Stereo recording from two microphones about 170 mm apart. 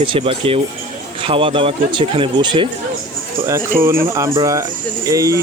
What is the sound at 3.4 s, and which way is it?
Speech, 15° right (ahead or behind).